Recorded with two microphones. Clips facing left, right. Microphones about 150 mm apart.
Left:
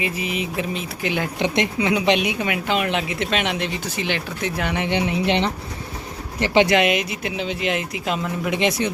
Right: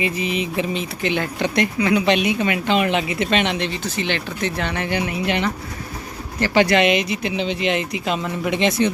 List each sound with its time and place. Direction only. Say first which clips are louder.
0.0 s speech: right 3 dB; 5° left (ahead or behind)
1.4 s speech: even; 20° left (ahead or behind)
6.7 s speech: right 2 dB; 5° left (ahead or behind)